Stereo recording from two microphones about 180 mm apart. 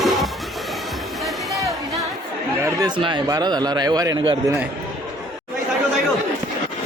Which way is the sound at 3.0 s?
25° right (ahead or behind).